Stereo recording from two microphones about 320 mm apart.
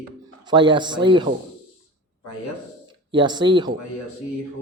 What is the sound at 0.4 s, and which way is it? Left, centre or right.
Speech, centre.